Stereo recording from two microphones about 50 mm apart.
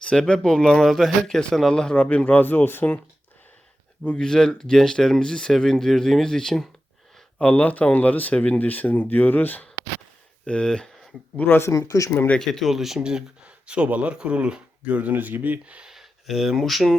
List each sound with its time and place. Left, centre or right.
0.0 s speech: centre
1.7 s a man's voice: centre; by 2.8 s left
4.2 s speech: centre
7.4 s speech: left
10.4 s speech: centre
11.4 s speech: left
11.7 s speech: left
12.4 s speech: centre
12.7 s speech: centre; by 15.8 s right
15.8 s a sound: centre
16.6 s speech: centre